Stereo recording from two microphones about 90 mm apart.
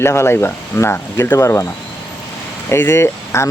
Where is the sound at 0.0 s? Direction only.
30° left (ahead or behind).